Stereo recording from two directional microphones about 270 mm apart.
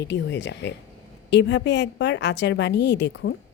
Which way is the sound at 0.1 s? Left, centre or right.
Left.